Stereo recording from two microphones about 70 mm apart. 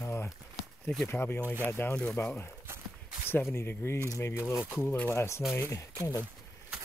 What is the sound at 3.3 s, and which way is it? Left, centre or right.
Speech, left.